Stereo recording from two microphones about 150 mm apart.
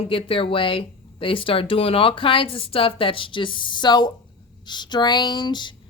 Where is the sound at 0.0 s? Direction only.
40° left (ahead or behind).